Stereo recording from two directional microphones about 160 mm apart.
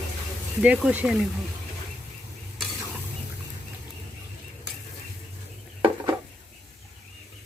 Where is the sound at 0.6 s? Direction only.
10° right (ahead or behind).